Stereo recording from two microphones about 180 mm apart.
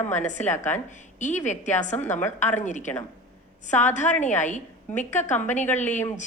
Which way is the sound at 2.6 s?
40° left (ahead or behind).